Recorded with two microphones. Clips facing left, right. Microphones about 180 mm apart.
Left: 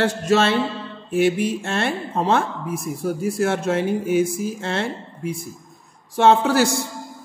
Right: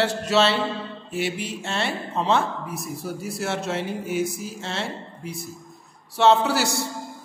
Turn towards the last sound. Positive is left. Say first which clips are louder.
# left 3 dB
turn(degrees=50)  # may be behind; listen again after turning